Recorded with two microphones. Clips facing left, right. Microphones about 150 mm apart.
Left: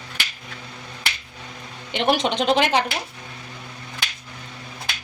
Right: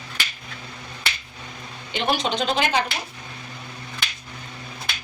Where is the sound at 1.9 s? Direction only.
70° left (ahead or behind).